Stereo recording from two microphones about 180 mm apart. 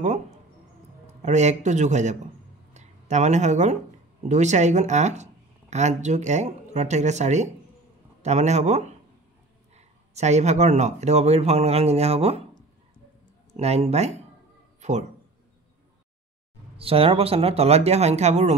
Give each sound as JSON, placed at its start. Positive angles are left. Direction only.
{"t": 1.2, "sound": "speech", "side_deg": -40}
{"t": 13.5, "sound": "speech", "side_deg": -35}
{"t": 14.8, "sound": "a sound", "side_deg": -40}
{"t": 16.7, "sound": "speech", "side_deg": -30}